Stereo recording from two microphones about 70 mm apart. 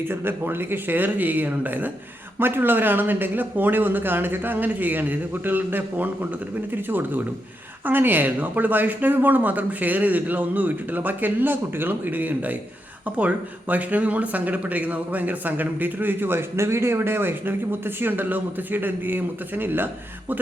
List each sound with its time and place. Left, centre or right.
0.0 s speech: right